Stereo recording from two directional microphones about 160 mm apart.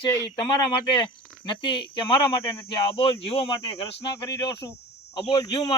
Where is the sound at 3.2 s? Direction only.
40° left (ahead or behind).